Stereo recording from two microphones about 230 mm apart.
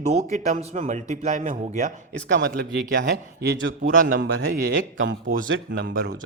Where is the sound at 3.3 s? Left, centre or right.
Right.